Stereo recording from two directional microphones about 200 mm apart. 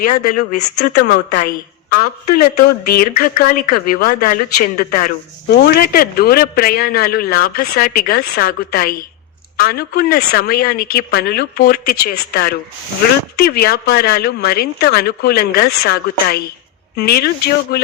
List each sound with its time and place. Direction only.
0.2 s speech: 45° left (ahead or behind)